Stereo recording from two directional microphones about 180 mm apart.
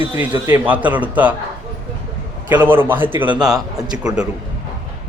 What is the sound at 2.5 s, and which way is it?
Speech, 10° right (ahead or behind).